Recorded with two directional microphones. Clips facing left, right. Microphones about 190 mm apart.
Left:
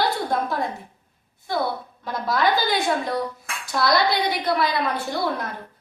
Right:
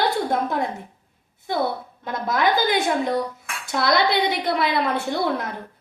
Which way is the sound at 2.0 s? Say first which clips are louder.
Even; 20° right (ahead or behind).